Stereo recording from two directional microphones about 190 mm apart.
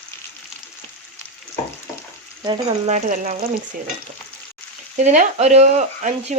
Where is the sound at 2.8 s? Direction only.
40° right (ahead or behind).